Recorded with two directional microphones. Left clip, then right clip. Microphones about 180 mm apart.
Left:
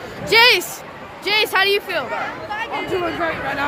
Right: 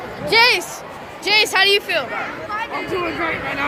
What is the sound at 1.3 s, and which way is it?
Speech, 25° left (ahead or behind).